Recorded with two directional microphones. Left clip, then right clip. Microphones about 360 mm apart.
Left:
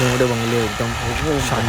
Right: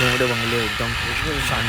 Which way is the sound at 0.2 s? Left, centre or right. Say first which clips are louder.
Left 2 dB; left.